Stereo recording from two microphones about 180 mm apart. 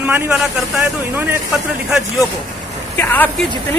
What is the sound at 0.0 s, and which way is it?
Speech, 10° right (ahead or behind).